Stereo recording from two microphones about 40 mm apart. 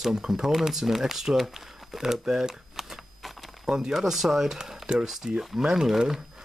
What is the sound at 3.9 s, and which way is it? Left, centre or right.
Speech, centre.